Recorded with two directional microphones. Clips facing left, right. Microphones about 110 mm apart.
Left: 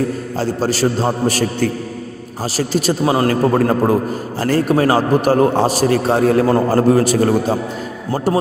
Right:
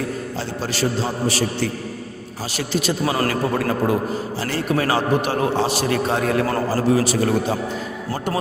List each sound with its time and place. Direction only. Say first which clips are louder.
0.3 s a man's voice: left 9 dB; 40° left (ahead or behind)
3.0 s a man's voice: left 7 dB; 25° left (ahead or behind)
3.2 s a man's voice: left 7 dB; 40° left (ahead or behind)
6.7 s a man's voice: left 6 dB; 50° left (ahead or behind)